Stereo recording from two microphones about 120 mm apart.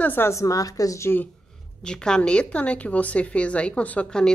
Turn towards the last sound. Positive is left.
turn(degrees=5)  # may be behind; listen again after turning